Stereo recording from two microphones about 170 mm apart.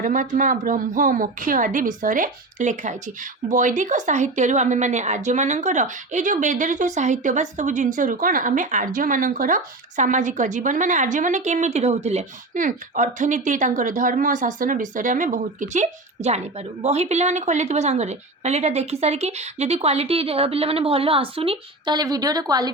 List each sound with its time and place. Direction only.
0.0 s a woman's voice: 50° right (ahead or behind); by 22.7 s 20° right (ahead or behind)